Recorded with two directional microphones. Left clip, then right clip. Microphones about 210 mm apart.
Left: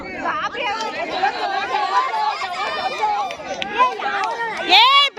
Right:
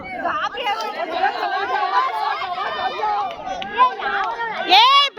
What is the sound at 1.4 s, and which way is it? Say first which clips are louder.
Chatter: even; 50° right (ahead or behind).